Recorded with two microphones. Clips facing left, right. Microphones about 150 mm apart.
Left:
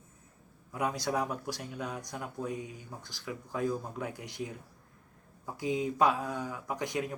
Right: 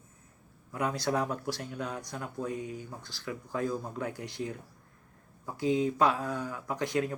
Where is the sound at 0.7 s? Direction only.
15° left (ahead or behind).